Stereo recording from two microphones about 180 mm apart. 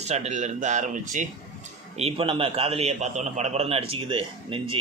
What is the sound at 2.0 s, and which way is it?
A man's voice, 30° right (ahead or behind).